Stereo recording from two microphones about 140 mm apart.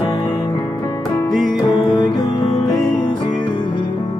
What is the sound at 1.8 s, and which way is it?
Music, 30° left (ahead or behind).